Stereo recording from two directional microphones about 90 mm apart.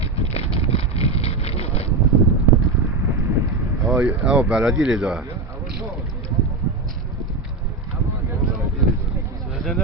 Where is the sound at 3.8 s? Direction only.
15° right (ahead or behind).